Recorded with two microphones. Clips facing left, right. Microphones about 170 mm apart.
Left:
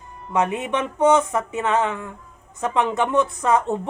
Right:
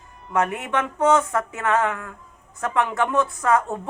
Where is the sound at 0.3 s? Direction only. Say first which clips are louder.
Left 1 dB; 20° left (ahead or behind).